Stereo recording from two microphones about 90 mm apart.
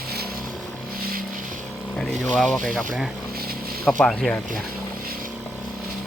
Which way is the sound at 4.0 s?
5° left (ahead or behind).